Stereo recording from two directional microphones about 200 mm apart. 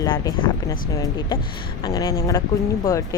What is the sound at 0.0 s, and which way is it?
Speech, 20° left (ahead or behind).